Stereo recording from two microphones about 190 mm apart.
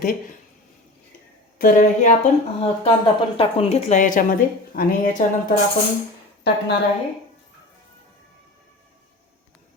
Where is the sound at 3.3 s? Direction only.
30° left (ahead or behind); by 5.2 s 50° left (ahead or behind).